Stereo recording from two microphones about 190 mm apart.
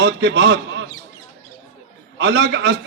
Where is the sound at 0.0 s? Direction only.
70° right (ahead or behind).